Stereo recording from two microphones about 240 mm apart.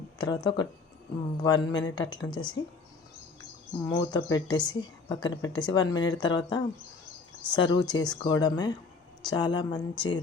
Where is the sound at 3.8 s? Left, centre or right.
Centre.